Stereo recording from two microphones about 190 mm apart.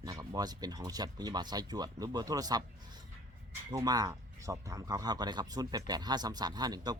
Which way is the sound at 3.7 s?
20° right (ahead or behind).